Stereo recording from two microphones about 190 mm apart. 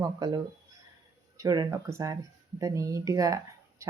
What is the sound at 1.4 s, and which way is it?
Speech, 20° right (ahead or behind).